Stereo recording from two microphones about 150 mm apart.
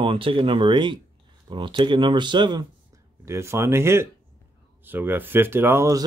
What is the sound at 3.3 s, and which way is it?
Speech, 20° right (ahead or behind).